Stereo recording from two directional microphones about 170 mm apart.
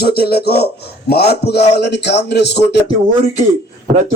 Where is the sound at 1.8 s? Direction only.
85° left.